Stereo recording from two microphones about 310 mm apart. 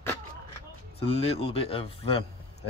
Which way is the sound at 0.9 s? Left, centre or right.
Centre.